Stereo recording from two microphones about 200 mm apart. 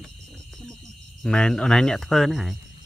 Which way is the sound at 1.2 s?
5° left (ahead or behind).